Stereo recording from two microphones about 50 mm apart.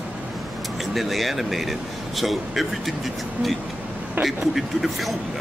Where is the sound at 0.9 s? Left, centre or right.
Centre.